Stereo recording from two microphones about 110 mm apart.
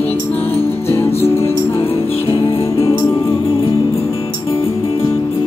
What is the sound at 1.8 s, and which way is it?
Music, 60° left (ahead or behind).